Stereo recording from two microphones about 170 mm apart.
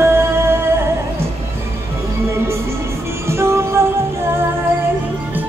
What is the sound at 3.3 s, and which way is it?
Music, 15° right (ahead or behind).